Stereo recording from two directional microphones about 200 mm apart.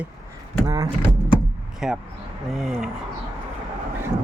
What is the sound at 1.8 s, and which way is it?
Speech, centre (ahead or behind).